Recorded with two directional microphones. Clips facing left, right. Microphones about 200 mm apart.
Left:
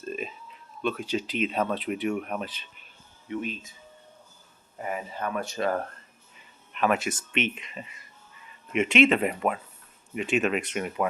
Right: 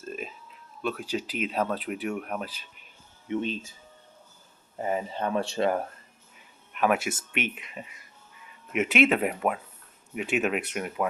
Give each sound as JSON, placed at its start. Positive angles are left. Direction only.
{"t": 0.0, "sound": "a sound", "side_deg": -5}
{"t": 0.8, "sound": "speech", "side_deg": -5}
{"t": 3.2, "sound": "speech", "side_deg": -30}
{"t": 4.8, "sound": "speech", "side_deg": -30}
{"t": 6.3, "sound": "speech", "side_deg": -10}